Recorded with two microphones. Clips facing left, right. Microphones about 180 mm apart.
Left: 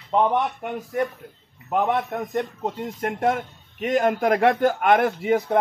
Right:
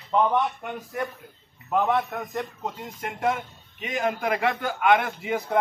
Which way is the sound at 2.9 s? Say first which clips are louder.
Left 3 dB; 50° left (ahead or behind).